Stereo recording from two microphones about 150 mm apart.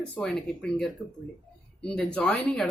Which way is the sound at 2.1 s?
10° left (ahead or behind).